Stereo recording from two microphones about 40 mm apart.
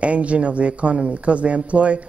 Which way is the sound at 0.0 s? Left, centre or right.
Right.